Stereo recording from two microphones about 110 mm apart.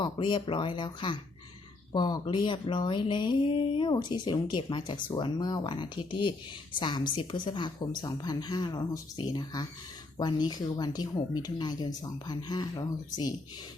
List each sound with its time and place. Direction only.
0.0 s speech: 45° left (ahead or behind)